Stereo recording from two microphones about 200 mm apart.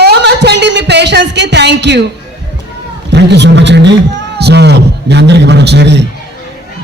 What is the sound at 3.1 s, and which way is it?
A man's voice, 60° right (ahead or behind).